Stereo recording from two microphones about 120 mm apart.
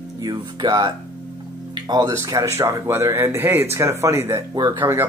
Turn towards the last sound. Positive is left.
turn(degrees=-20)  # may be behind; listen again after turning